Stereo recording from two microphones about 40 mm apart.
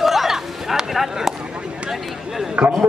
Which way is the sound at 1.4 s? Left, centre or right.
Right.